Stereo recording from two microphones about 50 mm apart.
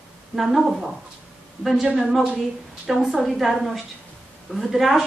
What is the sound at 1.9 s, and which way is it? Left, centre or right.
A woman's voice, centre.